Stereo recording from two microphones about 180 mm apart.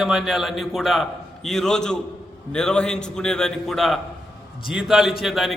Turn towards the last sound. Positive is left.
turn(degrees=0)  # may be behind; listen again after turning